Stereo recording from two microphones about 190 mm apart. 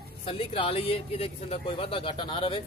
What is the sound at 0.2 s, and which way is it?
Speech, 30° left (ahead or behind).